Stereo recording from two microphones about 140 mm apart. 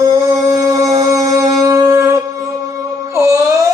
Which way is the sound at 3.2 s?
20° right (ahead or behind).